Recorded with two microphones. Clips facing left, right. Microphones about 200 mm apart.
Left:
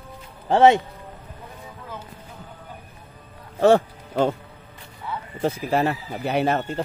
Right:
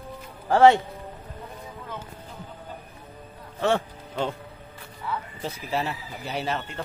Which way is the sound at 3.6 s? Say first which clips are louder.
Left 8 dB; 45° left (ahead or behind).